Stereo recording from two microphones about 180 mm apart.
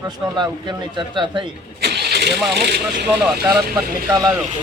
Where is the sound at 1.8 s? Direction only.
65° right (ahead or behind).